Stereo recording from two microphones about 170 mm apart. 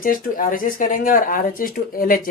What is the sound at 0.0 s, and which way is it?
Speech, 55° left (ahead or behind).